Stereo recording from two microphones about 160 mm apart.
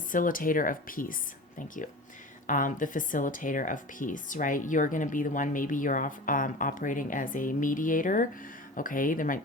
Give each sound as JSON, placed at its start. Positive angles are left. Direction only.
{"t": 0.1, "sound": "speech", "side_deg": 60}